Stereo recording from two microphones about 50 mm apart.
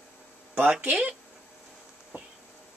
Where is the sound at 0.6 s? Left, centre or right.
Right.